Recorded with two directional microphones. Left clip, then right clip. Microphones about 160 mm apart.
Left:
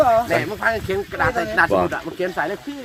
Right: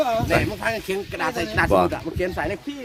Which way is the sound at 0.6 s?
40° right (ahead or behind).